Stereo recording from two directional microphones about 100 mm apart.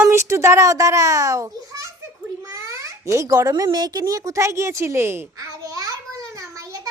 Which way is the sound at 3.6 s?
45° right (ahead or behind).